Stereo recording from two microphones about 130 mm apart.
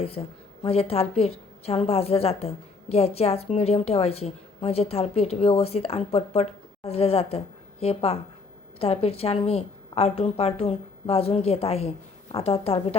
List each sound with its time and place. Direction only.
0.0 s a woman's voice: 50° left (ahead or behind)